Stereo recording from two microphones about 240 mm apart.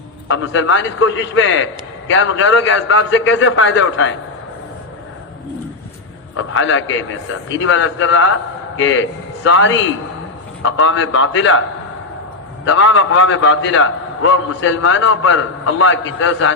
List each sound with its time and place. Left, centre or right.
0.3 s a man's voice: left
6.3 s a man's voice: left
12.6 s a man's voice: left